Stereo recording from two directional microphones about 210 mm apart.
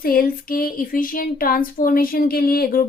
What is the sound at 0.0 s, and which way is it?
Speech, 45° left (ahead or behind).